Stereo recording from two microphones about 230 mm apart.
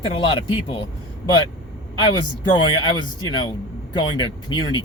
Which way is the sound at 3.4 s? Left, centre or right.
Centre.